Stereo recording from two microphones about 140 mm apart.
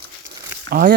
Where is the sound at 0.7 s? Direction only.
90° right.